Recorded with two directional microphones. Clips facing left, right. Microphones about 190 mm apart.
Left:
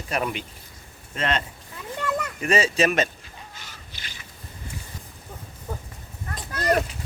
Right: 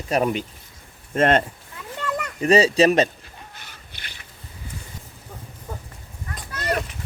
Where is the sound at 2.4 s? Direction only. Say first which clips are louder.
Right 6 dB; 35° right (ahead or behind).